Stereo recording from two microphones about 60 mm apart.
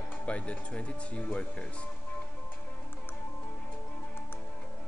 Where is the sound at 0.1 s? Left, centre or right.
Left.